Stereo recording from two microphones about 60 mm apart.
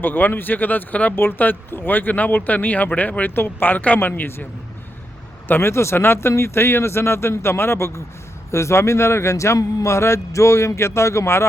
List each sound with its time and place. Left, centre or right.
0.0 s speech: left
5.5 s a man's voice: left